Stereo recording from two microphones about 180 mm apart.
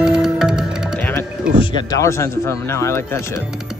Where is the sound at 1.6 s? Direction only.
20° left (ahead or behind).